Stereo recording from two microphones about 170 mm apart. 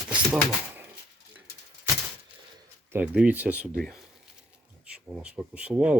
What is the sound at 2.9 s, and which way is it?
Speech, 10° right (ahead or behind).